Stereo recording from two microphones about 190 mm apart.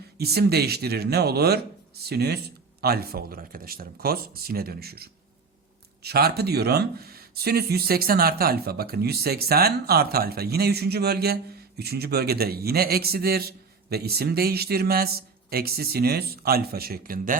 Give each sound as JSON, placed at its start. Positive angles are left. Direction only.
{"t": 0.2, "sound": "speech", "side_deg": -55}